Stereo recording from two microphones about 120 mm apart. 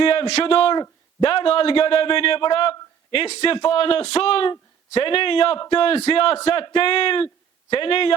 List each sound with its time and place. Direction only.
0.0 s a man's voice: 50° left (ahead or behind)